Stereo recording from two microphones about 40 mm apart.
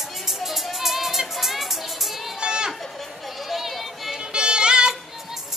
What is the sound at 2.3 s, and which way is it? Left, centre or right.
Children playing, right.